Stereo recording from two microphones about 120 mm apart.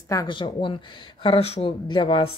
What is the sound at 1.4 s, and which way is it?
Speech, 60° left (ahead or behind).